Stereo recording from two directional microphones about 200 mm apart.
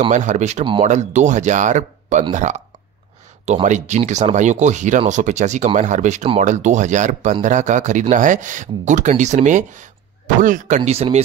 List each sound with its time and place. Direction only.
0.1 s speech: 35° right (ahead or behind)
10.8 s speech: 30° right (ahead or behind)